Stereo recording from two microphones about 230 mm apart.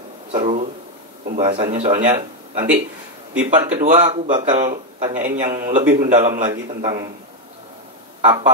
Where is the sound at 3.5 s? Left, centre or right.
Right.